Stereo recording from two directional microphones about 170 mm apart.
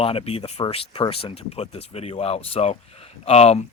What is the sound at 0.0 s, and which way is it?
Speech, 35° left (ahead or behind).